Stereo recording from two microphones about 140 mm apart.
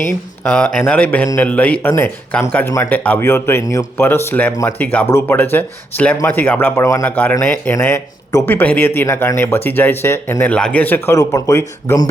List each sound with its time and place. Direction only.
0.5 s speech: 10° left (ahead or behind)